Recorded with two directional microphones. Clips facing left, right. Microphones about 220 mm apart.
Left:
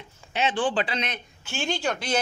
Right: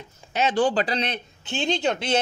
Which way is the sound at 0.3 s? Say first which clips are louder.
Right 4 dB; 40° right (ahead or behind).